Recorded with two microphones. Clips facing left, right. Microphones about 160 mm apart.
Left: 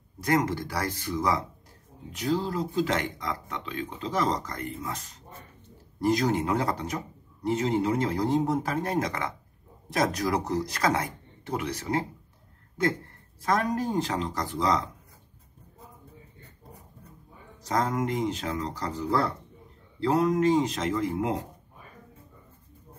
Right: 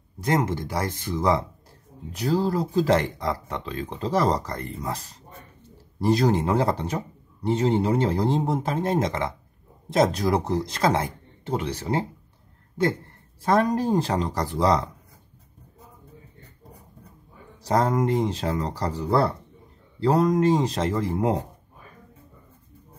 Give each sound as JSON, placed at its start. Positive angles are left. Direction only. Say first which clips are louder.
{"t": 0.2, "sound": "a man's voice", "louder": "right 1 dB", "side_deg": -25}
{"t": 13.4, "sound": "speech", "louder": "right 5 dB", "side_deg": -30}
{"t": 17.6, "sound": "speech", "louder": "right 5 dB", "side_deg": -35}